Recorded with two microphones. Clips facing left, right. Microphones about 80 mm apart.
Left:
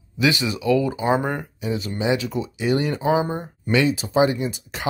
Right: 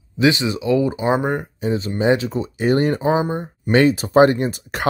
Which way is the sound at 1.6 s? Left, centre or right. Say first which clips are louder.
Right 5 dB; right.